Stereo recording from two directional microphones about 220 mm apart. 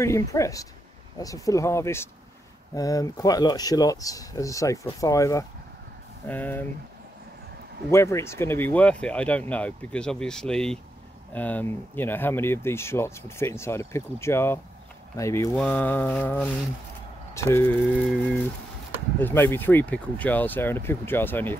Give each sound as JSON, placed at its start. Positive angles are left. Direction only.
{"t": 0.0, "sound": "speech", "side_deg": 15}
{"t": 7.9, "sound": "speech", "side_deg": 10}